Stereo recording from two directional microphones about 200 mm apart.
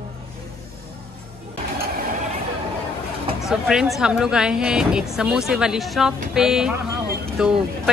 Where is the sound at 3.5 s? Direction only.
Centre (ahead or behind).